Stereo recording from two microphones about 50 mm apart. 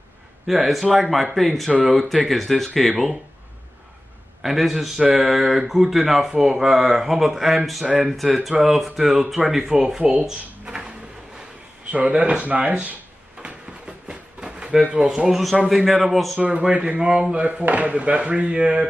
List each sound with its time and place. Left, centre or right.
0.5 s speech: centre
4.4 s speech: centre
11.9 s speech: right
13.4 s drawer open or close: right
15.0 s speech: centre
16.3 s speech: right